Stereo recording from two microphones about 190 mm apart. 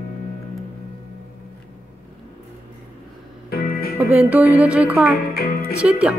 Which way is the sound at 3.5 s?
50° left (ahead or behind).